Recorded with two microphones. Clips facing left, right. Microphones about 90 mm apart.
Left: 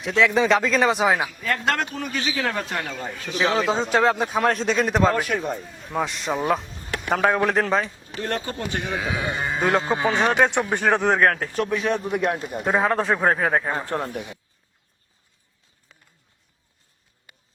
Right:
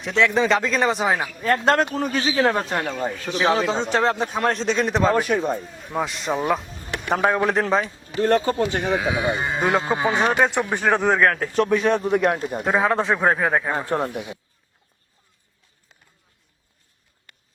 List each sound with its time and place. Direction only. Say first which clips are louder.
0.0 s a man's voice: even; centre (ahead or behind)
1.4 s a man's voice: right 5 dB; 35° right (ahead or behind)
3.7 s a man's voice: left 1 dB; 5° left (ahead or behind)
5.1 s a man's voice: right 4 dB; 20° right (ahead or behind)
5.9 s a man's voice: right 1 dB; centre (ahead or behind)
8.2 s a man's voice: right 9 dB; 35° right (ahead or behind)
8.9 s a man's voice: right 5 dB; 5° right (ahead or behind)
9.8 s speech: right 1 dB; 20° right (ahead or behind)
10.1 s a man's voice: even; 5° right (ahead or behind)
11.5 s a man's voice: right 4 dB; 35° right (ahead or behind)
12.6 s a man's voice: right 1 dB; centre (ahead or behind)
13.7 s a man's voice: right 3 dB; 20° right (ahead or behind)
17.3 s a sound: left 1 dB; 10° left (ahead or behind)